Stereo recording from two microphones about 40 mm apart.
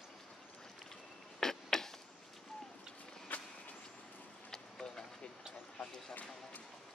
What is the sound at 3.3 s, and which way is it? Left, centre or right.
Vehicle, left.